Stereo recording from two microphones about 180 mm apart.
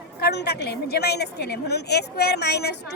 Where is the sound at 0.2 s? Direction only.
65° left (ahead or behind).